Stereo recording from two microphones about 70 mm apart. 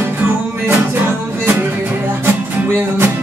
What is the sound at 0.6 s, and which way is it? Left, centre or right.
Music, right.